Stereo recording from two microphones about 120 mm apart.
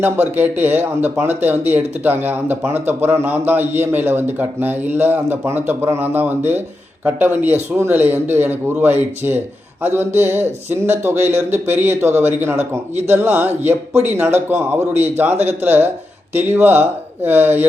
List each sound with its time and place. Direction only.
0.3 s speech: 15° right (ahead or behind)